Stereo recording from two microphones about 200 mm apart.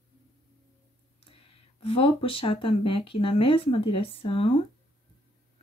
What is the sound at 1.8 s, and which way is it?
Speech, 30° left (ahead or behind).